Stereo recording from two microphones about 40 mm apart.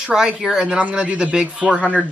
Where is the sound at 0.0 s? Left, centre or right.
Centre.